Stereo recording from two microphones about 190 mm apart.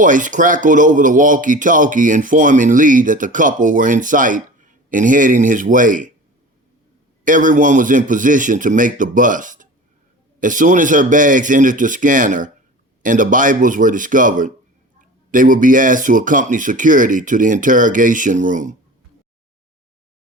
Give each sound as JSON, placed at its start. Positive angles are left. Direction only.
{"t": 0.0, "sound": "speech", "side_deg": -45}
{"t": 7.3, "sound": "speech", "side_deg": -45}